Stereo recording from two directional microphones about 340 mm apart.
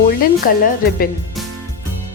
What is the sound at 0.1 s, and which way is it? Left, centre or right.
A woman's voice, left.